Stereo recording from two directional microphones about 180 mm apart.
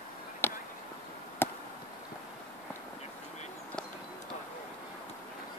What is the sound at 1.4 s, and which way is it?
Chop, 10° left (ahead or behind).